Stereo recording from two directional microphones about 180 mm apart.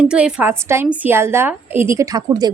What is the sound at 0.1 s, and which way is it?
A woman's voice, 5° right (ahead or behind).